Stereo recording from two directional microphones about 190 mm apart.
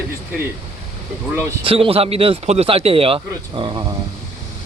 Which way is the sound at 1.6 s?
30° right (ahead or behind).